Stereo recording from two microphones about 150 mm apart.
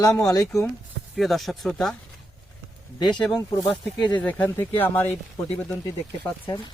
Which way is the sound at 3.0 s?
5° left (ahead or behind).